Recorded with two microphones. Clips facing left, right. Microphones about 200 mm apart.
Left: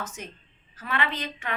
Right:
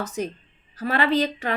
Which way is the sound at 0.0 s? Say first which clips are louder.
Right 10 dB; 35° right (ahead or behind).